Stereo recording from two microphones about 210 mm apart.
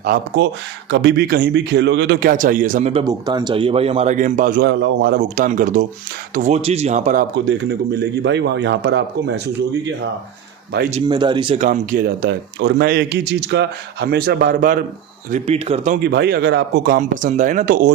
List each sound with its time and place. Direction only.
0.0 s a man's voice: 45° right (ahead or behind)
2.3 s speech: 40° right (ahead or behind)
2.9 s a man's voice: 20° right (ahead or behind); by 4.7 s 40° right (ahead or behind)
4.7 s speech: 55° right (ahead or behind); by 7.3 s 35° right (ahead or behind)
7.3 s a man's voice: 55° right (ahead or behind)
11.1 s speech: 20° right (ahead or behind); by 14.8 s 40° right (ahead or behind)
15.3 s speech: 30° right (ahead or behind)
16.0 s speech: 50° right (ahead or behind)